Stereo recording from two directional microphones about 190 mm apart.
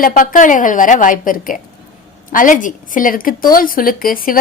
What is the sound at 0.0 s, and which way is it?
Speech, 45° left (ahead or behind).